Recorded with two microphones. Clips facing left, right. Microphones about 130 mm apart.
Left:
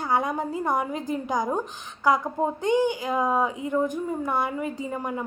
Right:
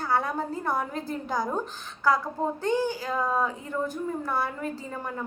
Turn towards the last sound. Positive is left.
turn(degrees=15)  # may be behind; listen again after turning